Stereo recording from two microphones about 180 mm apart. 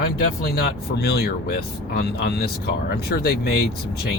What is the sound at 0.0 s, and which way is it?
Speech, 60° left (ahead or behind).